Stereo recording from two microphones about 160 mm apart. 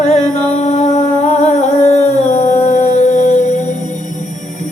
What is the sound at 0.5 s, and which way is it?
Humming, 45° left (ahead or behind).